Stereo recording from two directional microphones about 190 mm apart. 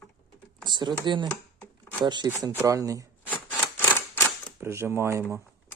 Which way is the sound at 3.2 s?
10° left (ahead or behind).